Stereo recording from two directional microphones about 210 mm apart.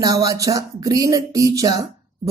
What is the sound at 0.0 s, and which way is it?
A woman's voice, 15° right (ahead or behind).